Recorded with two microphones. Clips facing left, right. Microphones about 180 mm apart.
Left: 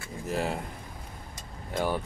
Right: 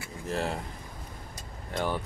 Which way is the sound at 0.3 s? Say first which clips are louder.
Left 1 dB; 5° left (ahead or behind).